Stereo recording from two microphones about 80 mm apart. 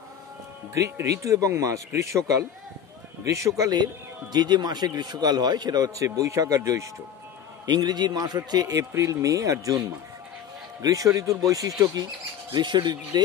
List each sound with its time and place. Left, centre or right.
0.7 s a man's voice: right
7.6 s a man's voice: right
12.5 s speech: right